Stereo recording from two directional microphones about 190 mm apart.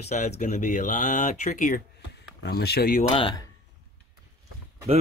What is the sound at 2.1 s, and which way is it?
Speech, 60° left (ahead or behind).